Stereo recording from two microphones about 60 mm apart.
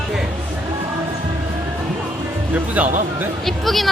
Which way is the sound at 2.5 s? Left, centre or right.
Right.